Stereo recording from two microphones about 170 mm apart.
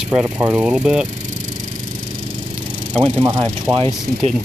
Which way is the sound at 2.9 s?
30° right (ahead or behind).